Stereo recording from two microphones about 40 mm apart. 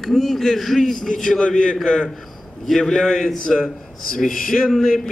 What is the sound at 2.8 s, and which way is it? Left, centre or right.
Speech, centre.